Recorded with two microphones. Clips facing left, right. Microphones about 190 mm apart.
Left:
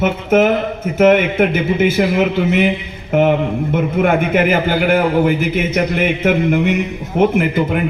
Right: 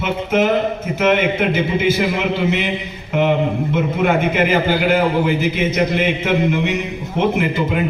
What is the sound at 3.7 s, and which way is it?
A man's voice, 50° left (ahead or behind).